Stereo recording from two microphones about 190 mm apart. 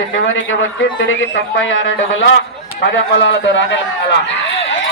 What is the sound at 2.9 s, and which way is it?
Speech, 75° left (ahead or behind).